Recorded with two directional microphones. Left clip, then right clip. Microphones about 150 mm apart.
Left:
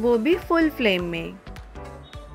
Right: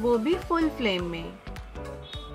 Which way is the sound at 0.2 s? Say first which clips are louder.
Left 5 dB; 25° left (ahead or behind).